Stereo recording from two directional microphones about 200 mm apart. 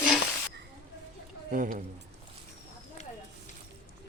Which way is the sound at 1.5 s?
45° right (ahead or behind).